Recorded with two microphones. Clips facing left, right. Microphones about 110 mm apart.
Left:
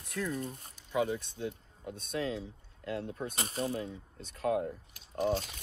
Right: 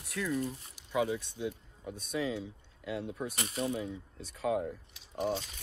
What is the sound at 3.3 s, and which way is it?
Speech, 35° left (ahead or behind).